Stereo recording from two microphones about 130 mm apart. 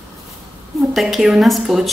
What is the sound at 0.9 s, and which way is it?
A woman's voice, centre (ahead or behind).